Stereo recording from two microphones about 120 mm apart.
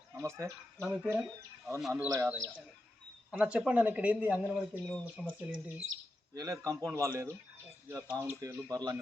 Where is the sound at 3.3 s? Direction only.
10° right (ahead or behind).